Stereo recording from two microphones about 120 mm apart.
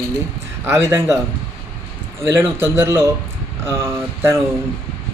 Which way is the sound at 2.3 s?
20° right (ahead or behind).